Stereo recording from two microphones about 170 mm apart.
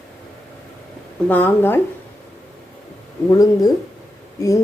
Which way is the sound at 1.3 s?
10° left (ahead or behind).